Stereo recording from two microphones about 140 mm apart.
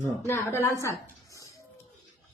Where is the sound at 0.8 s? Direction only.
20° left (ahead or behind).